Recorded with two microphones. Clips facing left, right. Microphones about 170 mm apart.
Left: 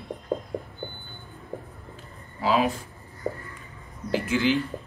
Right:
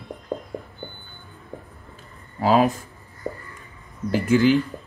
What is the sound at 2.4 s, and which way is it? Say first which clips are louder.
Speech: right 5 dB; 45° right (ahead or behind).